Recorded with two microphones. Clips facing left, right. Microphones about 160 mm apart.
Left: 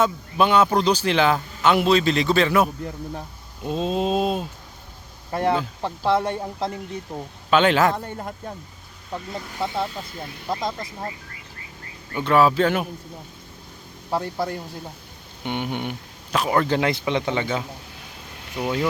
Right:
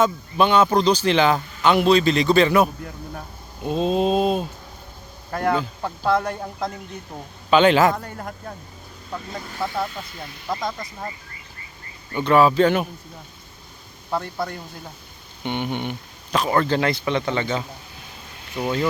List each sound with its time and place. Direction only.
0.0 s a man's voice: 5° left (ahead or behind)
5.3 s speech: 25° left (ahead or behind)
6.7 s a man's voice: centre (ahead or behind)
7.9 s speech: 20° left (ahead or behind)
12.1 s a man's voice: centre (ahead or behind)
14.1 s speech: 15° left (ahead or behind)
15.4 s speech: 5° left (ahead or behind)